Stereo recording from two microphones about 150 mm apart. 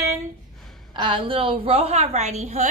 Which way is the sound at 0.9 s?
35° right (ahead or behind).